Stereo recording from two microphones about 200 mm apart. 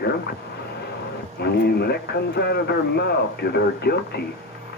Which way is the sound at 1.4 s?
55° left (ahead or behind).